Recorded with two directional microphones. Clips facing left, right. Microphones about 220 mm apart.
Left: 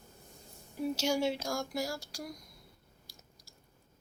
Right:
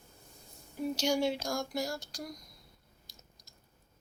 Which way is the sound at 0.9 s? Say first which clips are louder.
Right 1 dB; 5° left (ahead or behind).